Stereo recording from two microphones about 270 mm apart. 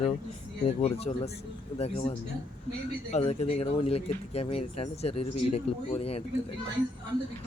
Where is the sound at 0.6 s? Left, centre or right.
Left.